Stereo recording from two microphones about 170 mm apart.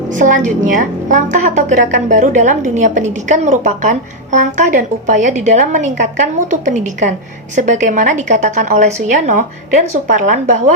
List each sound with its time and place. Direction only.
0.1 s a woman's voice: 50° right (ahead or behind)